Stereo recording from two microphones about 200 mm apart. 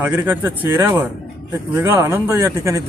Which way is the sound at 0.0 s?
10° right (ahead or behind).